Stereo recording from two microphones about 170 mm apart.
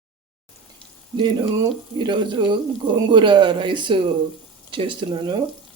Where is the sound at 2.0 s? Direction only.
30° right (ahead or behind).